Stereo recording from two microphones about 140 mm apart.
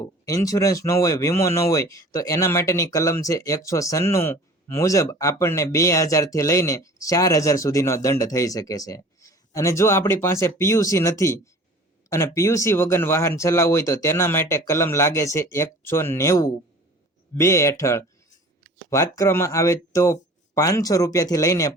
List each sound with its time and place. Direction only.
0.0 s speech: 25° left (ahead or behind)